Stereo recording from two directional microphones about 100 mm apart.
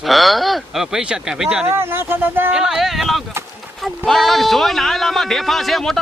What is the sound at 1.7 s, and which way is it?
Speech, 25° right (ahead or behind).